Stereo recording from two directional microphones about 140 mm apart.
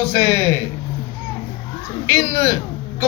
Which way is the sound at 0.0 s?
15° left (ahead or behind).